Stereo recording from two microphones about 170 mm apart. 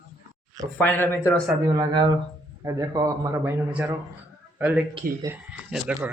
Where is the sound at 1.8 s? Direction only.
25° right (ahead or behind).